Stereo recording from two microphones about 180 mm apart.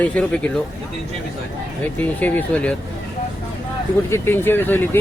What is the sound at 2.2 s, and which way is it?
Speech, 10° left (ahead or behind).